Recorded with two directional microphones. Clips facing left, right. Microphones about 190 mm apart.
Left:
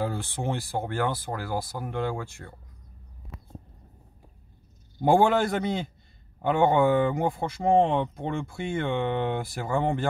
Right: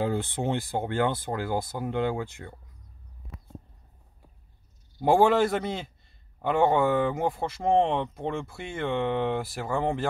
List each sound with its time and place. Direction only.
0.0 s speech: 20° right (ahead or behind)
5.0 s speech: centre (ahead or behind)